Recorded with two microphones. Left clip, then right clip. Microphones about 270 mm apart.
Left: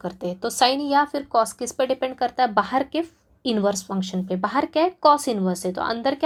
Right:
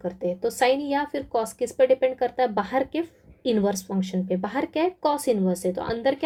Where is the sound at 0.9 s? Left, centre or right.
Centre.